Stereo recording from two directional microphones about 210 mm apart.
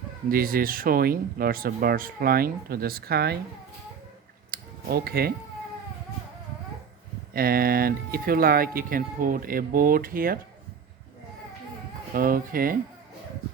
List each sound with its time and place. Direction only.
0.3 s speech: 45° right (ahead or behind)
4.5 s a sound: 45° right (ahead or behind)
7.3 s speech: 45° right (ahead or behind)
12.1 s speech: 45° right (ahead or behind)